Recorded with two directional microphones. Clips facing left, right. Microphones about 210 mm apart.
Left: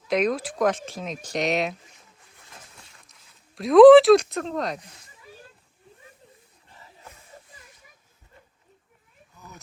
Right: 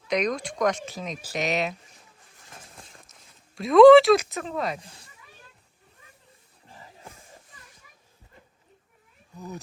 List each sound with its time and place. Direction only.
0.1 s speech: 5° left (ahead or behind)
2.6 s a sound: 30° right (ahead or behind)
3.5 s speech: centre (ahead or behind)
4.8 s speech: 30° right (ahead or behind)